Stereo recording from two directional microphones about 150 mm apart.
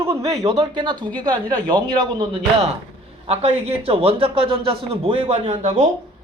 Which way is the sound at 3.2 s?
40° right (ahead or behind).